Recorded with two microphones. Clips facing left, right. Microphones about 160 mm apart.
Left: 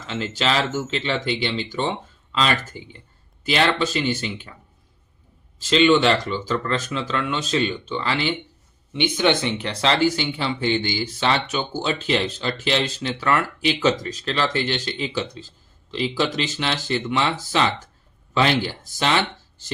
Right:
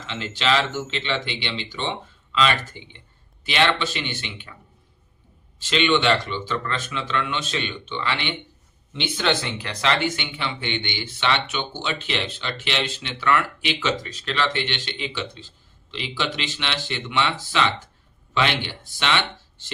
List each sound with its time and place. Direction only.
0.0 s speech: 40° left (ahead or behind)
5.5 s speech: 40° left (ahead or behind)
8.9 s speech: 15° left (ahead or behind); by 19.7 s 40° left (ahead or behind)